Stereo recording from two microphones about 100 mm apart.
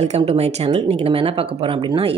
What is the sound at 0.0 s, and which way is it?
Speech, 90° right.